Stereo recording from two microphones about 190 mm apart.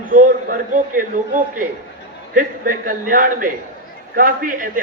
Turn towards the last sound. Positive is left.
turn(degrees=-45)  # may be behind; listen again after turning